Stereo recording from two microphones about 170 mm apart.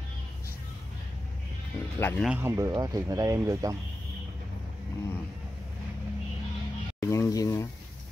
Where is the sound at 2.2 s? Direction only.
15° right (ahead or behind).